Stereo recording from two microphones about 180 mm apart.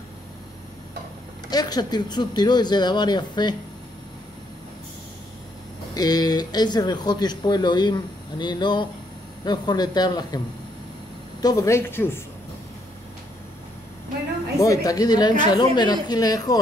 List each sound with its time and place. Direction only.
1.5 s speech: 20° left (ahead or behind)
5.9 s speech: 20° left (ahead or behind)
11.4 s speech: 15° left (ahead or behind)
14.6 s speech: 20° left (ahead or behind)